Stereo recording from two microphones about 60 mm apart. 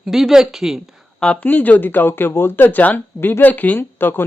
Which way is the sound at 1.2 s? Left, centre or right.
Centre.